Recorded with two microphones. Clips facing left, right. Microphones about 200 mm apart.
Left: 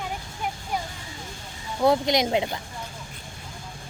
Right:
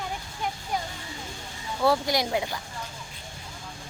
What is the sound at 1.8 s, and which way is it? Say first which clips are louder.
Speech: left 3 dB; 20° left (ahead or behind).